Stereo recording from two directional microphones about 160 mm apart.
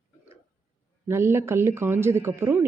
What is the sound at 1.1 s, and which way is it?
Speech, 15° right (ahead or behind).